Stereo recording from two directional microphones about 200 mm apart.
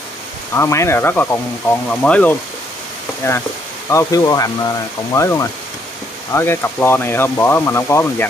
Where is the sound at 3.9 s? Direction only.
15° left (ahead or behind).